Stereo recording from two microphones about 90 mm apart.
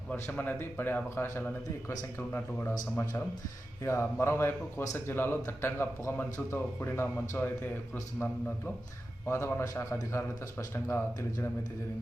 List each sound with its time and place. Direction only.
0.3 s speech: 20° left (ahead or behind)
3.8 s a man's voice: 30° left (ahead or behind)